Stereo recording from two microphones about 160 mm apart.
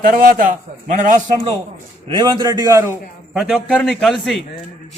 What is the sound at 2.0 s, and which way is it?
Speech, 30° right (ahead or behind).